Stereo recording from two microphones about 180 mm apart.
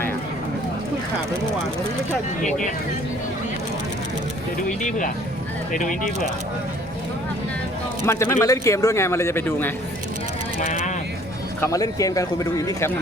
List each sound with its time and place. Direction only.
2.4 s speech: 40° left (ahead or behind)
4.8 s speech: 45° left (ahead or behind)
8.0 s speech: 15° left (ahead or behind)
10.6 s speech: 40° left (ahead or behind)
11.6 s speech: 20° left (ahead or behind)